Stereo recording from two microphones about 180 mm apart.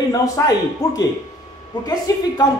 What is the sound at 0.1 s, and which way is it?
A woman's voice, 20° left (ahead or behind).